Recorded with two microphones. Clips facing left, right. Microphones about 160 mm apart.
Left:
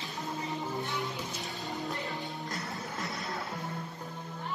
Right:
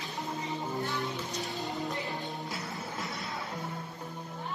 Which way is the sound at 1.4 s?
Centre (ahead or behind).